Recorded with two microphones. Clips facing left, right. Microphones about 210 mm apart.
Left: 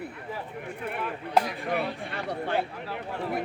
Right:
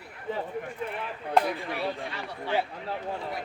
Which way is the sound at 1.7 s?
55° left (ahead or behind).